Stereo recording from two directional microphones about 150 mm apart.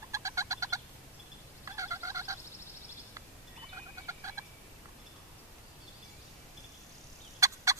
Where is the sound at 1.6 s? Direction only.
20° right (ahead or behind).